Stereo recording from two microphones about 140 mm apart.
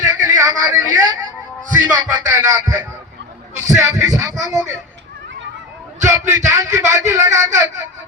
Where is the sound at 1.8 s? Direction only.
15° right (ahead or behind).